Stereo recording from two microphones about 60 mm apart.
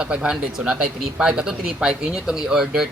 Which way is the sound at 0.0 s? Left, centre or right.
Centre.